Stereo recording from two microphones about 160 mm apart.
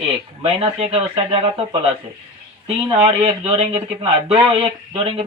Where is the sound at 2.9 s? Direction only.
35° right (ahead or behind).